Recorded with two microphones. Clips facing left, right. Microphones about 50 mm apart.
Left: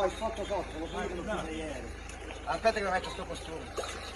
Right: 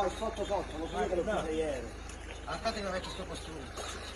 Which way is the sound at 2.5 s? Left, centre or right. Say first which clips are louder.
Left 7 dB; left.